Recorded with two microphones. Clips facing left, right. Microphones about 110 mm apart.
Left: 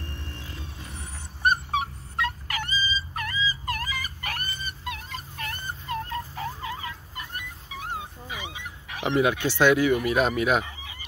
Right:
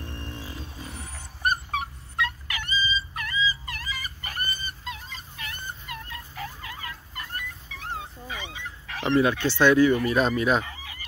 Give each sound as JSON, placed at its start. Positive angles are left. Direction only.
{"t": 0.3, "sound": "a sound", "side_deg": -5}
{"t": 1.7, "sound": "dog", "side_deg": 35}
{"t": 5.4, "sound": "fowl", "side_deg": 40}
{"t": 10.7, "sound": "fowl", "side_deg": 20}